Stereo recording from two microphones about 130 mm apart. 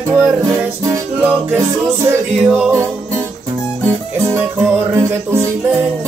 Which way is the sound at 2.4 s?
5° right (ahead or behind).